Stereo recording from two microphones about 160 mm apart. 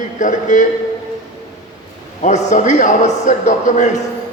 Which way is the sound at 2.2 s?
50° left (ahead or behind).